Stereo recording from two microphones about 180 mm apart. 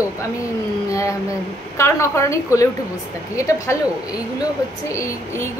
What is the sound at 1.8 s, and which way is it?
Speech, 15° left (ahead or behind).